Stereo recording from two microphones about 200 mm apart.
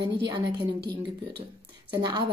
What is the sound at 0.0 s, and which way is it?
Speech, 25° right (ahead or behind).